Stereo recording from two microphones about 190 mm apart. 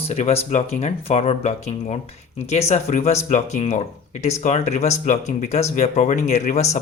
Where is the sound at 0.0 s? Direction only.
35° left (ahead or behind).